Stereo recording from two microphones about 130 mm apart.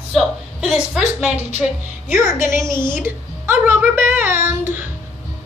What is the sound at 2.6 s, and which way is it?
A woman's voice, 20° right (ahead or behind).